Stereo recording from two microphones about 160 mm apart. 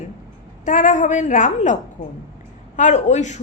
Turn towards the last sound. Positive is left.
turn(degrees=45)  # may be behind; listen again after turning